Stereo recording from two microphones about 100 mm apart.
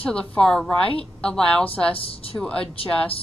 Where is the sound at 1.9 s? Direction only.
70° left (ahead or behind).